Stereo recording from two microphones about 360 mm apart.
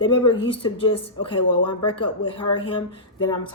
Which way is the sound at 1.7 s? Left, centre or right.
Centre.